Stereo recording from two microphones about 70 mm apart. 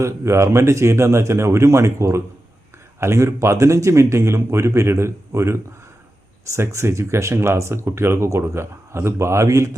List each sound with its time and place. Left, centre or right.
0.0 s speech: right